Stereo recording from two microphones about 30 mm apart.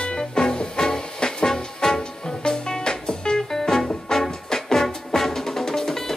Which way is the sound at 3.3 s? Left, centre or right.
Centre.